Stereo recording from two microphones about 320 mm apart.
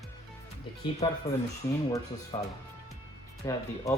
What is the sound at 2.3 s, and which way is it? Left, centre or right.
Speech, centre.